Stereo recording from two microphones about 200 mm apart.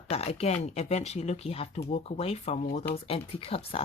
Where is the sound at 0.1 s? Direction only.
30° left (ahead or behind).